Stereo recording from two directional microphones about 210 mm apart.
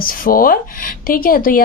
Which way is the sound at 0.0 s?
45° left (ahead or behind).